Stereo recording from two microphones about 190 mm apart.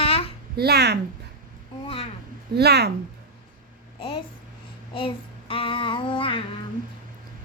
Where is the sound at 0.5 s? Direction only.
55° right (ahead or behind).